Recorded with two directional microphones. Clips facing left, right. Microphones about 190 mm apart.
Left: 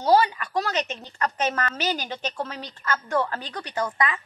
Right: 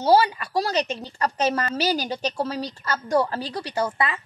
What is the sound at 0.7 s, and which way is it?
A woman's voice, 35° right (ahead or behind).